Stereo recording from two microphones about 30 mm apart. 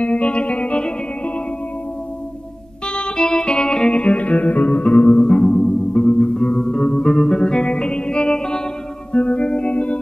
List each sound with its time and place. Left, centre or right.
0.0 s music: left
2.9 s music: left
3.9 s music: left
9.1 s music: left